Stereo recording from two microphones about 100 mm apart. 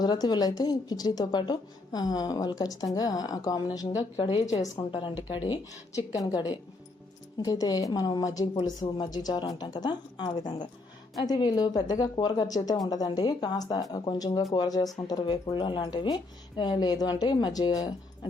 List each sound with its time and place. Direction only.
0.0 s a woman's voice: 45° left (ahead or behind)
4.2 s a woman's voice: 55° left (ahead or behind)
4.5 s a woman's voice: 35° left (ahead or behind)
5.3 s speech: 50° left (ahead or behind)
6.1 s a woman's voice: 40° left (ahead or behind)
15.2 s speech: 50° left (ahead or behind)